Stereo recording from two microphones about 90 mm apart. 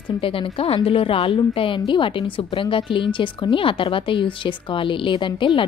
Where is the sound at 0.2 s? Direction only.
85° left.